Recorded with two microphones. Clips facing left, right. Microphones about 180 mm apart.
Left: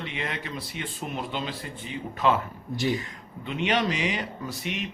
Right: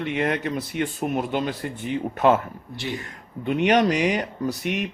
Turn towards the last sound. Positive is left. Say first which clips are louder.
# right 7 dB
turn(degrees=-55)  # may be behind; listen again after turning